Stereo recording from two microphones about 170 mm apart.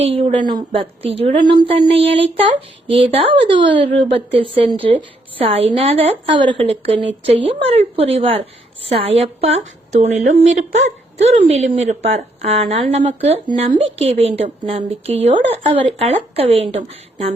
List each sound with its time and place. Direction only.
0.0 s speech: 35° right (ahead or behind)